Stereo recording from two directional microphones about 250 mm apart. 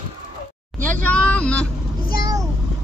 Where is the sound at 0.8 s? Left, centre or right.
Centre.